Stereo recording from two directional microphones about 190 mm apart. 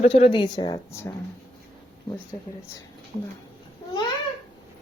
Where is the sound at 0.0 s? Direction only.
30° left (ahead or behind).